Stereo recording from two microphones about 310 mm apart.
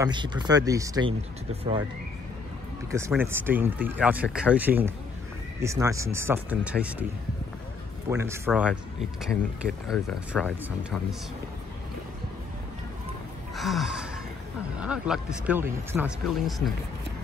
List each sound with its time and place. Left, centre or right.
0.0 s speech: centre
3.1 s speech: centre
8.1 s speech: centre
9.8 s speech: centre
13.6 s gasp: centre
14.8 s speech: centre